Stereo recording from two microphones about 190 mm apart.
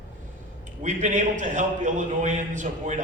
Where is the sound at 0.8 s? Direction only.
40° right (ahead or behind).